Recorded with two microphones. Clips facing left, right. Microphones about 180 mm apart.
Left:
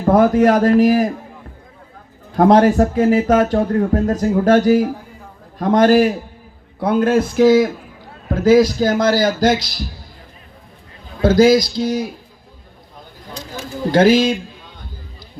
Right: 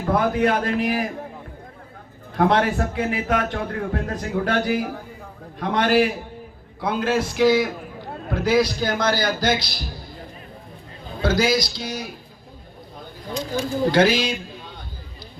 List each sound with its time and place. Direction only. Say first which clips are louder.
0.0 s speech: left 8 dB; 40° left (ahead or behind)
2.3 s a man's voice: left 8 dB; 40° left (ahead or behind)
11.2 s a man's voice: left 9 dB; 45° left (ahead or behind)
13.9 s a man's voice: left 8 dB; 45° left (ahead or behind)